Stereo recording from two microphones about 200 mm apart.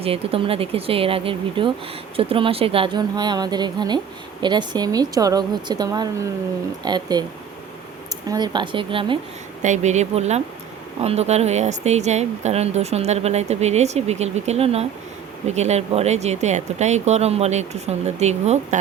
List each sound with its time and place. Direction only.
0.0 s speech: 30° right (ahead or behind)
8.3 s speech: 20° right (ahead or behind)
9.6 s speech: 35° right (ahead or behind)